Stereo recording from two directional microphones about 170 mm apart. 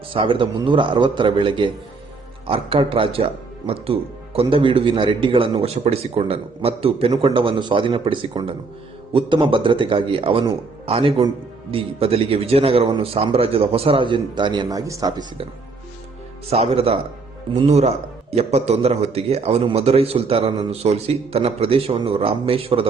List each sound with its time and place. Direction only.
0.1 s a man's voice: 30° right (ahead or behind)
4.4 s a man's voice: 30° right (ahead or behind)
16.5 s a man's voice: 35° right (ahead or behind)